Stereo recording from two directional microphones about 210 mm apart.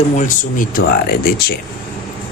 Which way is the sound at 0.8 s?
50° left (ahead or behind).